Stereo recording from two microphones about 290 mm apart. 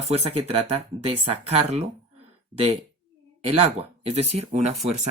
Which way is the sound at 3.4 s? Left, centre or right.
Centre.